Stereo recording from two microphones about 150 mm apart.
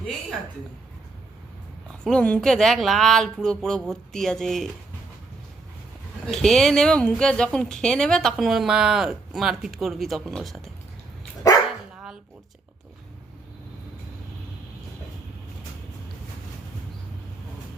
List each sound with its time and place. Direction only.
2.0 s speech: 5° left (ahead or behind)
6.3 s speech: centre (ahead or behind)